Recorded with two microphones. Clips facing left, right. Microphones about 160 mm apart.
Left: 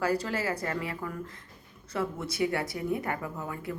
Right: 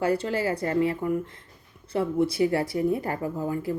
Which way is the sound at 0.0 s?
30° right (ahead or behind).